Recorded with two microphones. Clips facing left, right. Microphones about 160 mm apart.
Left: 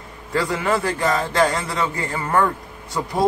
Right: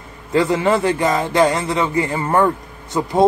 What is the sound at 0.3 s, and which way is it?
A man's voice, 20° right (ahead or behind).